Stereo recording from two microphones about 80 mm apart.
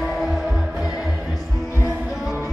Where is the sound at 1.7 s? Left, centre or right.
Right.